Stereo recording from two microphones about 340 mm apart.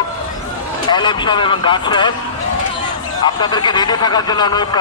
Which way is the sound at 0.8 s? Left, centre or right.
Centre.